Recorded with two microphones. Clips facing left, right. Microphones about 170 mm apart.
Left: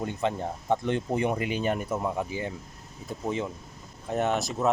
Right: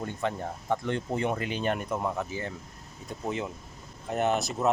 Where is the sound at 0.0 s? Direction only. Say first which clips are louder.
Left 3 dB; 20° left (ahead or behind).